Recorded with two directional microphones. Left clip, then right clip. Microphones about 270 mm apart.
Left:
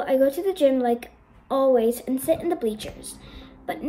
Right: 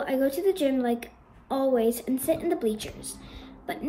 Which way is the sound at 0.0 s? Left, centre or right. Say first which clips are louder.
Left 4 dB; centre.